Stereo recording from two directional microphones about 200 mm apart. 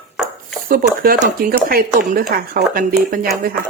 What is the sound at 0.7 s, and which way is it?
Speech, 45° right (ahead or behind).